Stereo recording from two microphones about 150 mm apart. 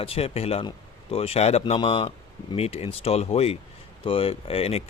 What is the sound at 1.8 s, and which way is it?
Speech, 35° left (ahead or behind).